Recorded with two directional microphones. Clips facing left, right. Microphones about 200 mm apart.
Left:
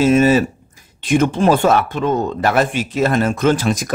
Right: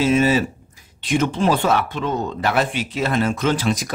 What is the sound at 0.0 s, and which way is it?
Speech, 45° left (ahead or behind).